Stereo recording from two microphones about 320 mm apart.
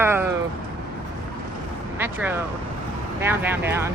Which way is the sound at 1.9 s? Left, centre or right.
Centre.